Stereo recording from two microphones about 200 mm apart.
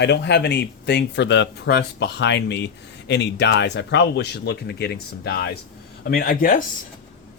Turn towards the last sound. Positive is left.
turn(degrees=45)  # may be behind; listen again after turning